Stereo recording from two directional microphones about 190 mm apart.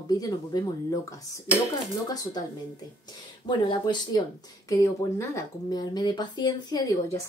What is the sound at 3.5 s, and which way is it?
A woman's voice, 25° left (ahead or behind).